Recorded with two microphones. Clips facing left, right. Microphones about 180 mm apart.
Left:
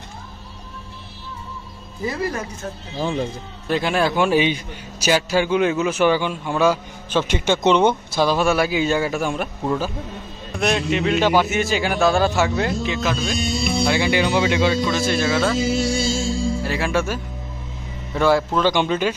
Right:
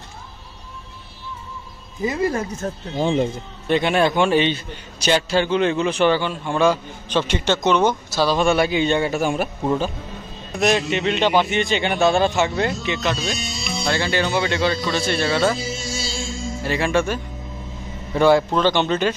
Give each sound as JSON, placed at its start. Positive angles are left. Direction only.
{"t": 2.0, "sound": "speech", "side_deg": -25}
{"t": 3.6, "sound": "a man's voice", "side_deg": 0}
{"t": 7.6, "sound": "speech", "side_deg": 25}
{"t": 8.3, "sound": "a man's voice", "side_deg": 5}
{"t": 10.6, "sound": "a man's voice", "side_deg": 0}
{"t": 13.4, "sound": "music", "side_deg": 55}
{"t": 13.8, "sound": "a man's voice", "side_deg": 15}
{"t": 15.6, "sound": "music", "side_deg": 65}
{"t": 16.6, "sound": "a man's voice", "side_deg": 0}